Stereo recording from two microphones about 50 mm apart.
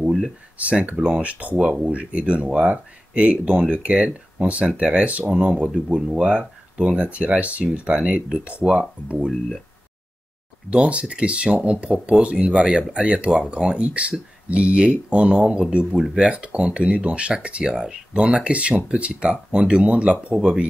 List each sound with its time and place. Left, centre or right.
0.6 s speech: right
10.7 s speech: right